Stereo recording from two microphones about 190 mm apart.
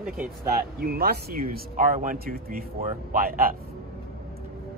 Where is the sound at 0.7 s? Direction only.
55° right (ahead or behind).